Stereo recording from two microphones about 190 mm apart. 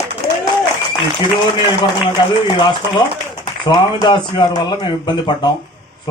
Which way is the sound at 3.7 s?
25° left (ahead or behind).